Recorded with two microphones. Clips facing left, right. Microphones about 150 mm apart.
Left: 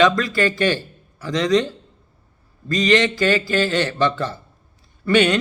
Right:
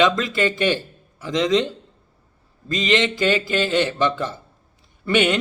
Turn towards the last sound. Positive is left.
turn(degrees=-20)  # may be behind; listen again after turning